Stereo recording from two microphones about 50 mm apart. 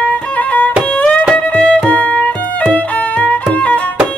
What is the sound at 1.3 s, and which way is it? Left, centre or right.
Music, centre.